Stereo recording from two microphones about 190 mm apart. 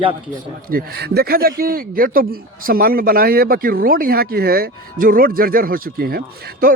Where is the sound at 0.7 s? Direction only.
50° right (ahead or behind).